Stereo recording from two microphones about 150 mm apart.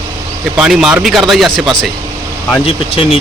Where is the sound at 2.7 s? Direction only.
40° left (ahead or behind).